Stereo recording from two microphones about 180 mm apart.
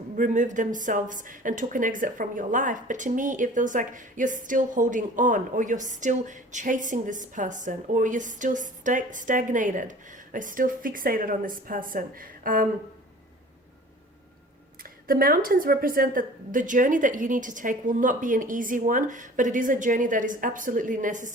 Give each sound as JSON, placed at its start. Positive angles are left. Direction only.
{"t": 0.2, "sound": "a woman's voice", "side_deg": -45}
{"t": 14.8, "sound": "a woman's voice", "side_deg": -55}